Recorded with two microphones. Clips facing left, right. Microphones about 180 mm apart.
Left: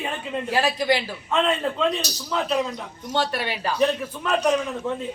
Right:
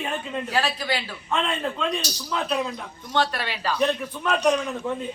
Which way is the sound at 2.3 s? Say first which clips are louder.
Left 2 dB; centre (ahead or behind).